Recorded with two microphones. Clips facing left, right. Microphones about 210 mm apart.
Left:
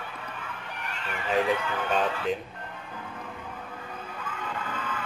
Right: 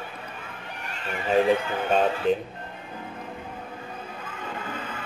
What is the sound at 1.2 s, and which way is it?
Speech, 30° right (ahead or behind).